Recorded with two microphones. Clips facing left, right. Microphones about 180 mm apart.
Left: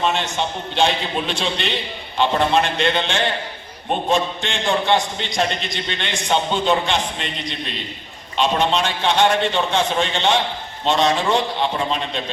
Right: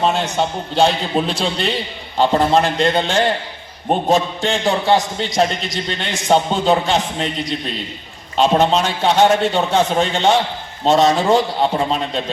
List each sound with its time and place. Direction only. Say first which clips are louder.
0.0 s a man's voice: right 4 dB; 40° right (ahead or behind)